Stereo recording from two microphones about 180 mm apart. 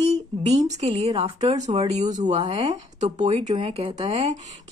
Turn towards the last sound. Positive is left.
turn(degrees=-30)  # may be behind; listen again after turning